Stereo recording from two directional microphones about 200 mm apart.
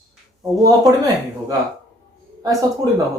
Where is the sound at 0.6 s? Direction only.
20° right (ahead or behind).